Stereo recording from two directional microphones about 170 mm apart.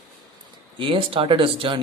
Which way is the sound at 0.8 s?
30° right (ahead or behind).